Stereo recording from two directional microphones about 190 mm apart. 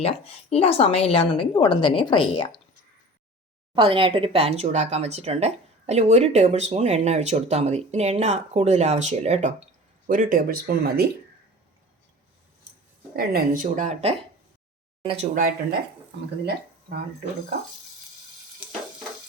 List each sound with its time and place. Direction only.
0.0 s a woman's voice: 30° left (ahead or behind)
3.8 s speech: 25° right (ahead or behind); by 11.1 s 55° right (ahead or behind)
13.1 s speech: 50° right (ahead or behind); by 15.3 s 30° right (ahead or behind)
15.4 s speech: 50° right (ahead or behind)